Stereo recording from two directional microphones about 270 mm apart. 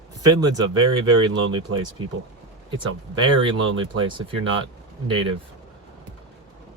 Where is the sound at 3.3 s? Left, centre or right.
Centre.